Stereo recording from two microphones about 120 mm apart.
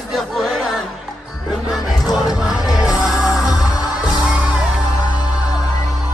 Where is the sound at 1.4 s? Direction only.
Centre (ahead or behind).